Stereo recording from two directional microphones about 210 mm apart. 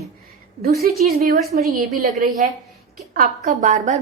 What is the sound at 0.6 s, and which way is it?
A woman's voice, 45° right (ahead or behind).